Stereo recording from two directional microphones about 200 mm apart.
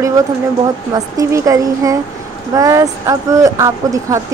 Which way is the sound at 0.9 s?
15° right (ahead or behind).